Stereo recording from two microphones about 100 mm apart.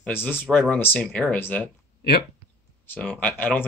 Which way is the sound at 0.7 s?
20° left (ahead or behind).